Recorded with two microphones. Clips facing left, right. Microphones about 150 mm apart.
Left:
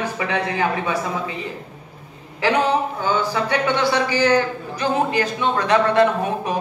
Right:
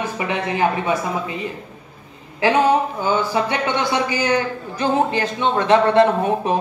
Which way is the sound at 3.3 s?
20° right (ahead or behind).